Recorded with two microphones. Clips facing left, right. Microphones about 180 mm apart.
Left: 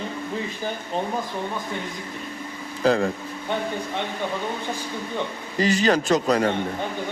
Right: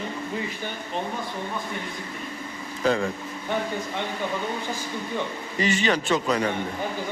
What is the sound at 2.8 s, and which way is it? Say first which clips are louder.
Speech: left 3 dB; 35° left (ahead or behind).